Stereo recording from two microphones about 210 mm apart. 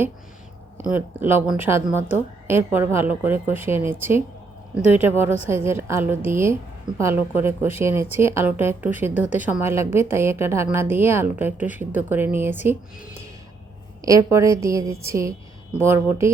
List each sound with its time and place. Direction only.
0.8 s a woman's voice: 10° right (ahead or behind)
14.0 s a woman's voice: 15° right (ahead or behind)